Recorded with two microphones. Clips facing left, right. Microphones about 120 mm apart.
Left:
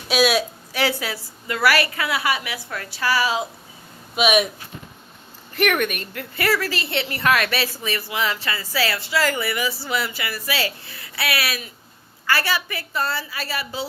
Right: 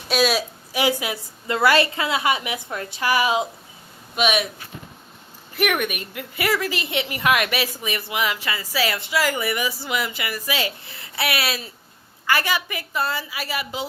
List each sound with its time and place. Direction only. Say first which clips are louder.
0.1 s a woman's voice: left 2 dB; centre (ahead or behind)
0.7 s a woman's voice: right 2 dB; 15° right (ahead or behind)
4.1 s speech: left 2 dB; 5° left (ahead or behind)
5.5 s a woman's voice: left 2 dB; 10° right (ahead or behind)